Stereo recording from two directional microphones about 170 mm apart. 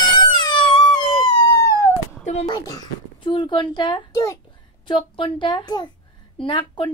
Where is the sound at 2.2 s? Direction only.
40° left (ahead or behind).